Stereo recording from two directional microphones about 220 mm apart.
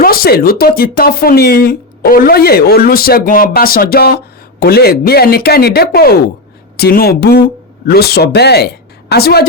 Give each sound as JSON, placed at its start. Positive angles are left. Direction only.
{"t": 0.0, "sound": "speech", "side_deg": 40}